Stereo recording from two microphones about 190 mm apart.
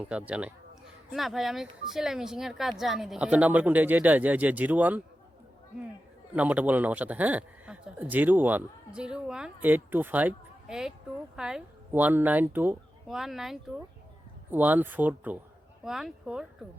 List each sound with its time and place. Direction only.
0.1 s speech: 5° right (ahead or behind)
6.3 s speech: 10° right (ahead or behind)